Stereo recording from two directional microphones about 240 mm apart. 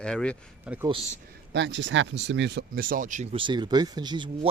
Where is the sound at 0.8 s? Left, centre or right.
Right.